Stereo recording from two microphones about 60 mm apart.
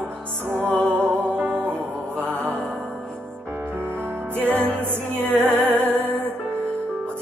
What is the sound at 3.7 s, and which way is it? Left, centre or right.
Music, right.